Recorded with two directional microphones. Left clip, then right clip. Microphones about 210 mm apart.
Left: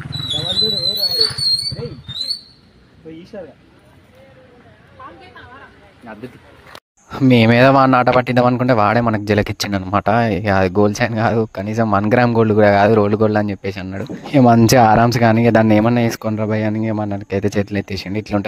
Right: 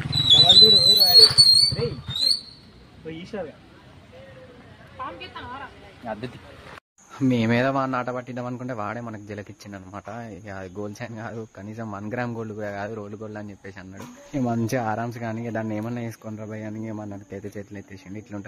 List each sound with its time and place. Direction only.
0.0 s wild animals: 15° left (ahead or behind)
7.1 s speech: 40° left (ahead or behind)